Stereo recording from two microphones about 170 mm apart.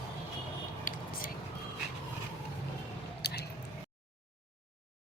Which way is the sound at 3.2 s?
70° left (ahead or behind).